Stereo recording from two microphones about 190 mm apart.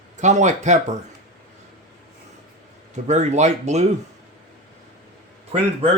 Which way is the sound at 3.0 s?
35° right (ahead or behind).